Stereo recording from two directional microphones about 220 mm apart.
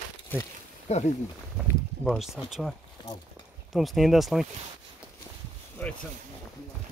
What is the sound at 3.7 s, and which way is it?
Speech, centre (ahead or behind).